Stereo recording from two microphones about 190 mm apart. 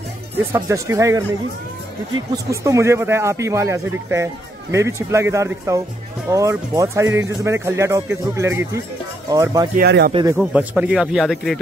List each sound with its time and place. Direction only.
0.4 s a man's voice: 15° right (ahead or behind)
2.3 s a man's voice: 15° right (ahead or behind)
9.8 s speech: 55° right (ahead or behind)
10.3 s speech: 10° right (ahead or behind)